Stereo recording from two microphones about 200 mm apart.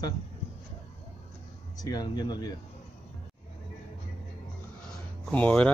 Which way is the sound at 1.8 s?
20° left (ahead or behind).